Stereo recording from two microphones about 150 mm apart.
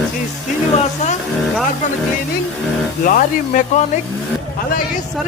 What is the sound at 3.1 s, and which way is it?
Speech, 60° left (ahead or behind).